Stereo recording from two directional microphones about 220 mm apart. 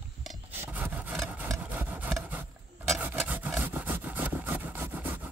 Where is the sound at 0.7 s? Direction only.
5° right (ahead or behind).